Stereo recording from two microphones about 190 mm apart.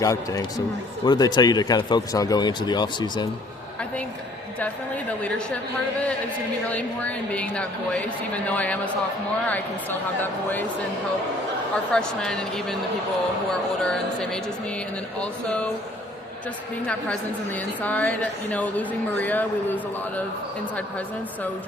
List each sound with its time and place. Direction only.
0.0 s a woman's voice: 15° left (ahead or behind)
6.7 s a woman's voice: 5° left (ahead or behind)
11.9 s speech: 5° left (ahead or behind)
15.2 s a woman's voice: 5° left (ahead or behind)
16.8 s a woman's voice: 5° left (ahead or behind)